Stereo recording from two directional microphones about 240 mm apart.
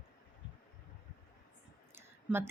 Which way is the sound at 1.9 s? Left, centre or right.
Centre.